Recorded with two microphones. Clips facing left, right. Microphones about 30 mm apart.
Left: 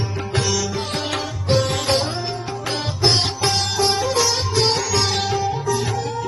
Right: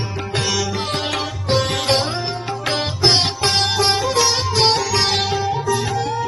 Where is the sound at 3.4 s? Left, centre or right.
Right.